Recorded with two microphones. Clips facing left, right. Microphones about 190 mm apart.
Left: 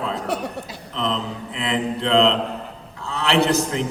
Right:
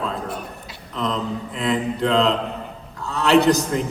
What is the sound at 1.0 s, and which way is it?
Mantra, 45° right (ahead or behind).